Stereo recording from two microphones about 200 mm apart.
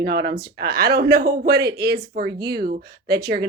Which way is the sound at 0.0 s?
55° right (ahead or behind).